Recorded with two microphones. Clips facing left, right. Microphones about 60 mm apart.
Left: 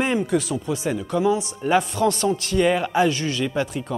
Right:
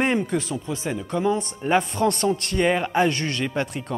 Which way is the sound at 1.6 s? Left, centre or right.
Centre.